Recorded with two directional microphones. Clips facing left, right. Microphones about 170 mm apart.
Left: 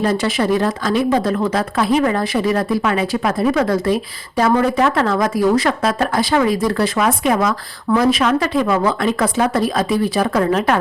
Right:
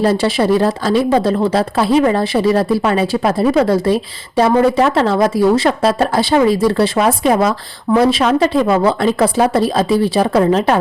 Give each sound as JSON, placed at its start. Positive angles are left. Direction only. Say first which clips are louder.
{"t": 0.0, "sound": "speech", "louder": "right 4 dB", "side_deg": -30}